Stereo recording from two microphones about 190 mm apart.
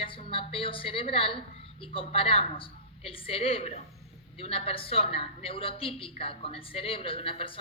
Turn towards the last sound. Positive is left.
turn(degrees=30)  # may be behind; listen again after turning